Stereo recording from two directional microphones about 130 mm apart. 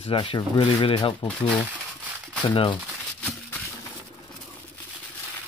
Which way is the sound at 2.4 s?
40° left (ahead or behind).